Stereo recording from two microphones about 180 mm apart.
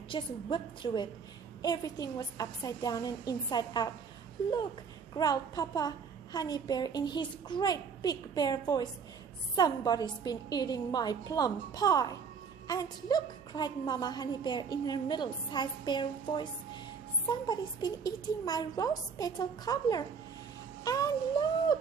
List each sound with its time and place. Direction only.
0.1 s a woman's voice: 25° left (ahead or behind)
5.1 s a woman's voice: 20° left (ahead or behind)
20.8 s a sound: 20° left (ahead or behind)